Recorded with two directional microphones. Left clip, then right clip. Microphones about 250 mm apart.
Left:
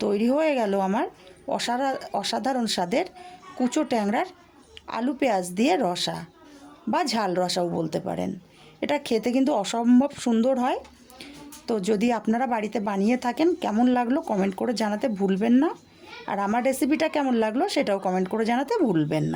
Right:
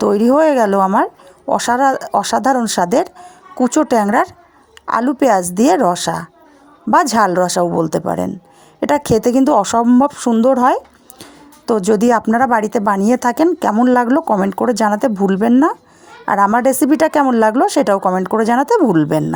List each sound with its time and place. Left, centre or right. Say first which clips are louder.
0.0 s speech: right 11 dB; right